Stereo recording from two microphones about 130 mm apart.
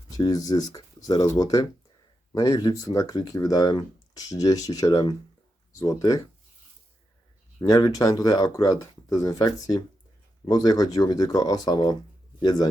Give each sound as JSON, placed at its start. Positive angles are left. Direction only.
{"t": 0.2, "sound": "speech", "side_deg": 30}
{"t": 7.6, "sound": "speech", "side_deg": 30}